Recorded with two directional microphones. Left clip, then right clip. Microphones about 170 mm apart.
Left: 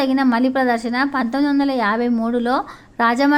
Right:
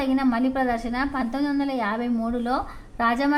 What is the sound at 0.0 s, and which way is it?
A woman's voice, 35° left (ahead or behind).